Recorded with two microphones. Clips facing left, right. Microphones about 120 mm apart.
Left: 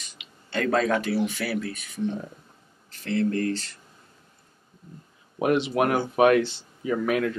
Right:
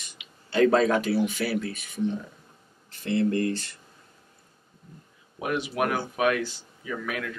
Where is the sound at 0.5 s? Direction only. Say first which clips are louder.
Right 3 dB; 5° right (ahead or behind).